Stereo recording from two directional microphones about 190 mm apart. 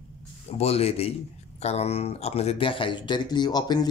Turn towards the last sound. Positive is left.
turn(degrees=20)  # may be behind; listen again after turning